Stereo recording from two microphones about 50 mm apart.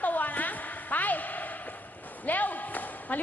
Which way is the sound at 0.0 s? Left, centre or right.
Left.